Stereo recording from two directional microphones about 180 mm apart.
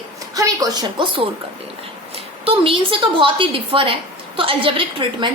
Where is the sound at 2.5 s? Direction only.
30° right (ahead or behind).